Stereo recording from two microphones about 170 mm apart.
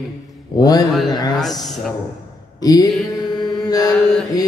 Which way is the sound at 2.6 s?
20° left (ahead or behind).